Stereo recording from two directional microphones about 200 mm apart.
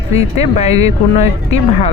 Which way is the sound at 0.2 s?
35° left (ahead or behind).